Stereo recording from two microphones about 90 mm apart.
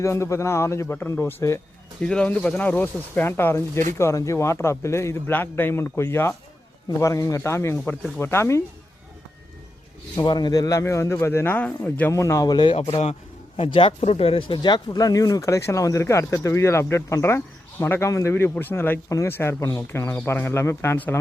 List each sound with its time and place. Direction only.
0.0 s speech: 30° left (ahead or behind)
2.0 s speech: 10° left (ahead or behind); by 8.6 s 30° left (ahead or behind)
10.2 s speech: 55° left (ahead or behind); by 12.1 s 15° left (ahead or behind)
12.1 s speech: 35° left (ahead or behind)
12.5 s speech: 65° left (ahead or behind)
14.7 s speech: 45° left (ahead or behind); by 21.2 s 25° left (ahead or behind)